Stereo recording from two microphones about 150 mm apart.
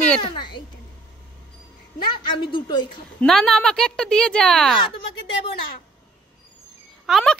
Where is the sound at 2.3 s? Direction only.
30° left (ahead or behind).